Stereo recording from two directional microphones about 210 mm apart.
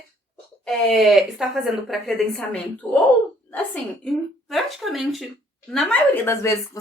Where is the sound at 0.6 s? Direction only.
Centre (ahead or behind).